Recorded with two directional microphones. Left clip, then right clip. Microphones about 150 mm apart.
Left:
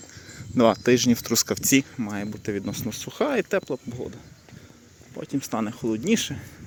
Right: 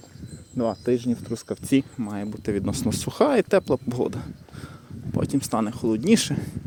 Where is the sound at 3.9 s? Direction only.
90° right.